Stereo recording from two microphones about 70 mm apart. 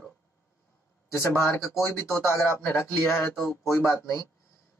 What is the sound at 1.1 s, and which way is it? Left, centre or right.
Speech, left.